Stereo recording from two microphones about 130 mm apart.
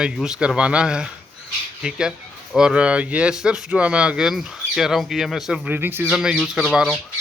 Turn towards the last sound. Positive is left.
turn(degrees=-5)  # may be behind; listen again after turning